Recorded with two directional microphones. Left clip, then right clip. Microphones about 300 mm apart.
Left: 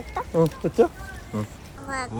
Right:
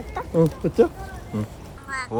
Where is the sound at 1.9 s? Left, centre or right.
Centre.